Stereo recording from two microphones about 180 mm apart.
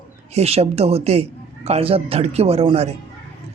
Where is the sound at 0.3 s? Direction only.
35° right (ahead or behind).